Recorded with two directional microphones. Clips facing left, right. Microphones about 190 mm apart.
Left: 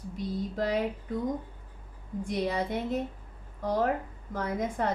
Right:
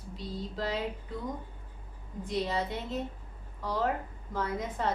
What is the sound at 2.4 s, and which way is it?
A woman's voice, 50° left (ahead or behind).